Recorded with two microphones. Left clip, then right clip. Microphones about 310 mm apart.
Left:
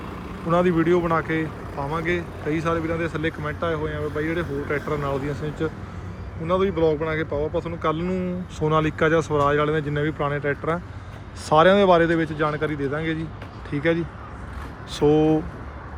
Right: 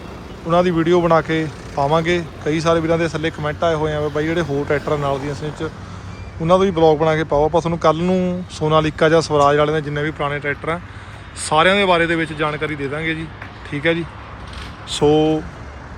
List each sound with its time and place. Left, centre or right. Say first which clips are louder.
0.5 s speech: right 4 dB; centre
6.5 s speech: right 7 dB; centre